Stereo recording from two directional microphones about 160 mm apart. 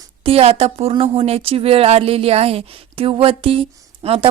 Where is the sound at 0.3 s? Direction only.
35° right (ahead or behind).